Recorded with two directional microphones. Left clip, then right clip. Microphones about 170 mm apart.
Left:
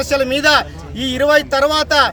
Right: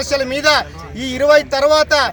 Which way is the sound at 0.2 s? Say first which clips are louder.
Left 2 dB; 35° left (ahead or behind).